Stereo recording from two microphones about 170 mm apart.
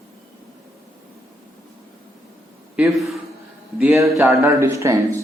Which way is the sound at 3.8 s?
15° right (ahead or behind).